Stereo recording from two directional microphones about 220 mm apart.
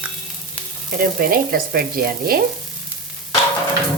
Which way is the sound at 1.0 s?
40° right (ahead or behind).